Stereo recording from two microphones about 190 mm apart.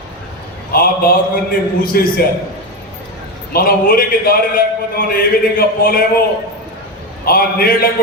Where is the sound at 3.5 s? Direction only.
50° left (ahead or behind).